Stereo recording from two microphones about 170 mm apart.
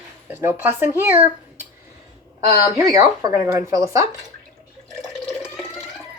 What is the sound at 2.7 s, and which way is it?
Speech, 20° right (ahead or behind).